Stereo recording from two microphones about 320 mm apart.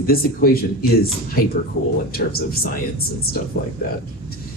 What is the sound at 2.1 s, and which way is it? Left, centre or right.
Speech, left.